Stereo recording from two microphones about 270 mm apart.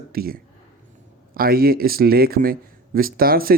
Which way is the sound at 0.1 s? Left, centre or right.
Right.